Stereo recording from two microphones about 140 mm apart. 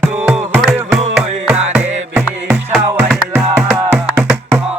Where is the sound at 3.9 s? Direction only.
15° right (ahead or behind).